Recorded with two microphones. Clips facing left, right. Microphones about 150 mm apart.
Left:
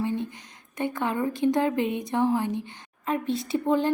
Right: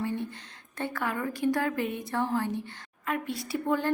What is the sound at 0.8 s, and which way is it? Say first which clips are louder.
A woman's voice: left 5 dB; 20° left (ahead or behind).